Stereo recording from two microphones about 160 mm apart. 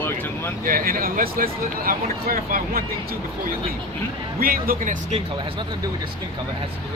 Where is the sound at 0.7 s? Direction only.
60° right (ahead or behind).